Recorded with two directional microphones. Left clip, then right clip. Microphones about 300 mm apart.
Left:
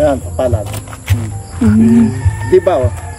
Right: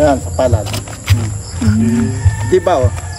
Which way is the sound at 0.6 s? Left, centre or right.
Right.